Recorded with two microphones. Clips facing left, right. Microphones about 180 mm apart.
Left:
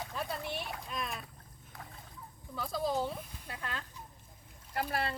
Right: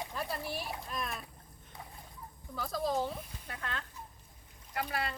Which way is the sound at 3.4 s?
15° left (ahead or behind).